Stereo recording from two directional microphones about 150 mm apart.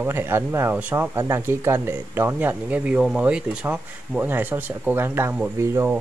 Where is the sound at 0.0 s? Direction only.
15° right (ahead or behind).